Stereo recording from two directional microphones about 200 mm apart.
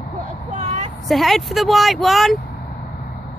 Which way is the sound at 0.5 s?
35° right (ahead or behind).